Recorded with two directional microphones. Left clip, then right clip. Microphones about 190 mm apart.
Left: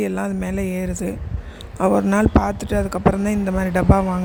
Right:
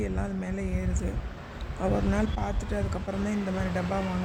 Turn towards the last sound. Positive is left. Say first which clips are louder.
# left 12 dB
turn(degrees=45)  # may be behind; listen again after turning